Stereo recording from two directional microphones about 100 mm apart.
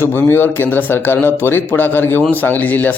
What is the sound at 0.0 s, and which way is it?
Speech, 20° left (ahead or behind).